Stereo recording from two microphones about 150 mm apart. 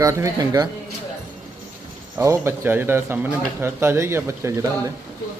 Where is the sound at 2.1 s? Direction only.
20° right (ahead or behind).